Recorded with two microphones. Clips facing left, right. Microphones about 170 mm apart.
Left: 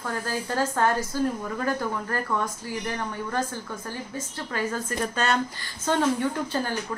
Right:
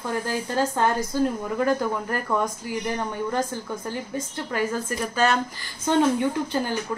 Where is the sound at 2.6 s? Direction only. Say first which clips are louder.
Right 3 dB; 20° right (ahead or behind).